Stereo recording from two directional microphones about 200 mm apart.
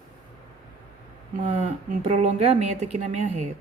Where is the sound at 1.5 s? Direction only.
35° right (ahead or behind).